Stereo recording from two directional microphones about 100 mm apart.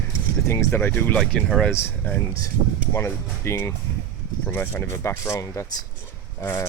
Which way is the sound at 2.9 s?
25° left (ahead or behind).